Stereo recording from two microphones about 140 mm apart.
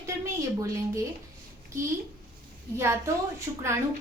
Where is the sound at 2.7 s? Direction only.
20° right (ahead or behind).